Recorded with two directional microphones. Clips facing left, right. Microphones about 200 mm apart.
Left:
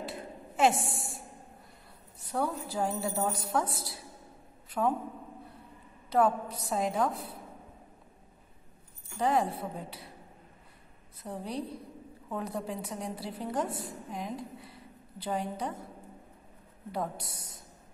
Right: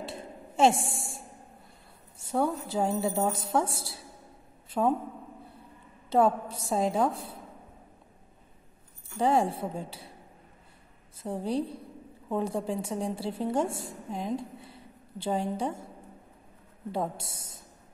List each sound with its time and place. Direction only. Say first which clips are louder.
0.0 s a sound: even; 25° right (ahead or behind)
2.1 s a woman's voice: right 4 dB; 25° right (ahead or behind)
6.0 s a woman's voice: right 2 dB; 25° right (ahead or behind)
9.2 s a woman's voice: right 3 dB; 30° right (ahead or behind)
11.2 s a woman's voice: right 6 dB; 30° right (ahead or behind)
16.9 s a woman's voice: right 3 dB; 25° right (ahead or behind)